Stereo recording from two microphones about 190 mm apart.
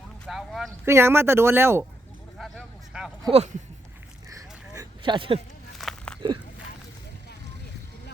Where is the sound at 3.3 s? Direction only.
35° right (ahead or behind).